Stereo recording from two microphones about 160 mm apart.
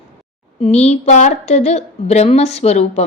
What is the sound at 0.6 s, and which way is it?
Speech, 40° left (ahead or behind).